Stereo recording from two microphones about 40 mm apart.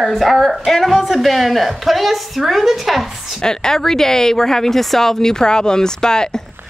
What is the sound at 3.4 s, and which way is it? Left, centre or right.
Speech, centre.